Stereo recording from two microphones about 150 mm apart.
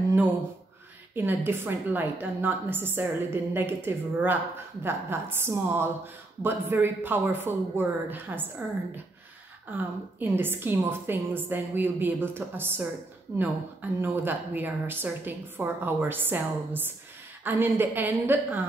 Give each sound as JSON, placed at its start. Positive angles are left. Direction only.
{"t": 1.1, "sound": "a woman's voice", "side_deg": -15}